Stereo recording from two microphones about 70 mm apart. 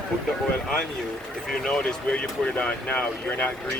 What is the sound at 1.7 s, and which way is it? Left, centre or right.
Speech, centre.